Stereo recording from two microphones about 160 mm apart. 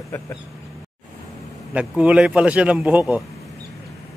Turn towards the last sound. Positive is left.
turn(degrees=-10)  # may be behind; listen again after turning